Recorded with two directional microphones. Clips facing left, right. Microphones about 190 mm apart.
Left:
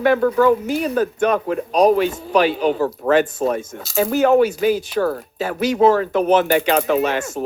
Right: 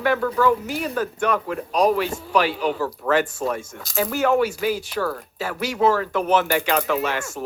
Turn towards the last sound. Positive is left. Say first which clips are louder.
# left 5 dB
turn(degrees=20)  # may be behind; listen again after turning